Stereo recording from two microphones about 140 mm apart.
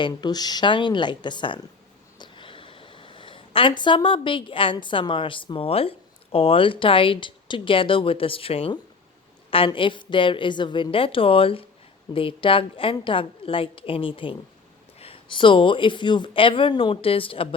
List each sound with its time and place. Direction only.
0.0 s a woman's voice: 30° left (ahead or behind)